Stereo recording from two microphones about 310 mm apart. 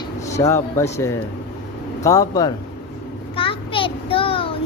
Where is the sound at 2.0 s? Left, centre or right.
Centre.